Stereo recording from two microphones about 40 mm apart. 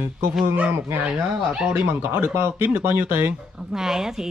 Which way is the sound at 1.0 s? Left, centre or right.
Right.